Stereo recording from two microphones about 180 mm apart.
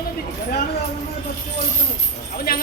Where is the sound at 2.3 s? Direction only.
55° left (ahead or behind).